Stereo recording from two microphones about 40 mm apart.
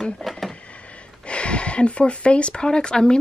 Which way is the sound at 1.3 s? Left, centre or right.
Left.